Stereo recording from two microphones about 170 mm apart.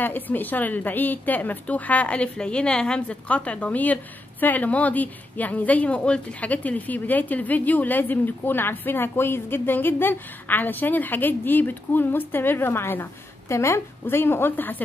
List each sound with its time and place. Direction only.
0.0 s a woman's voice: 10° left (ahead or behind)